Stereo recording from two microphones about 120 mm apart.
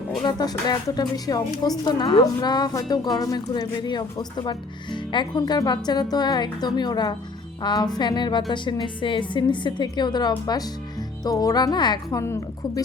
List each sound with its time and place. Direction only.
0.2 s a woman's voice: 35° left (ahead or behind)
12.2 s a woman's voice: 25° left (ahead or behind)